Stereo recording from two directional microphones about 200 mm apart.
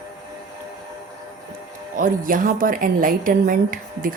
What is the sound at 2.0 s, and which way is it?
A woman's voice, 45° right (ahead or behind).